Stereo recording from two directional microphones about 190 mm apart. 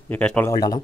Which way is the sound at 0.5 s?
20° left (ahead or behind).